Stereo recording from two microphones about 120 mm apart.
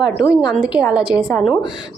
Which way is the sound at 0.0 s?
40° left (ahead or behind).